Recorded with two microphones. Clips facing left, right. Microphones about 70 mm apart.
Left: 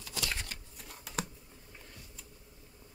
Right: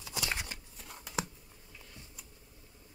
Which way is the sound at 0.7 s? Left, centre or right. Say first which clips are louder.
Right 1 dB; centre.